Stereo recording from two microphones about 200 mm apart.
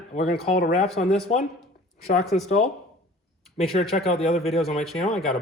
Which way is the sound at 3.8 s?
30° left (ahead or behind).